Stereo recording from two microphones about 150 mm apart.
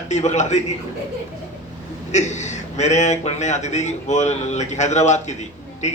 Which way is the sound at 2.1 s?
50° left (ahead or behind).